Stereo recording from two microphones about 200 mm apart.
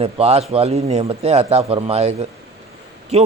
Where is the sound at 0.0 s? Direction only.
30° right (ahead or behind).